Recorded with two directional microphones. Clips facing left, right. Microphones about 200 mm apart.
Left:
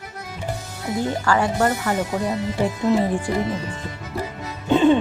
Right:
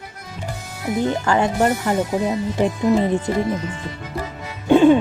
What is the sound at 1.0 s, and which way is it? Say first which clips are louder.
Speech: right 2 dB; 20° right (ahead or behind).